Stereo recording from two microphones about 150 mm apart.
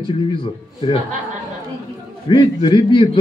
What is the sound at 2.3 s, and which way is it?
Speech, 35° left (ahead or behind).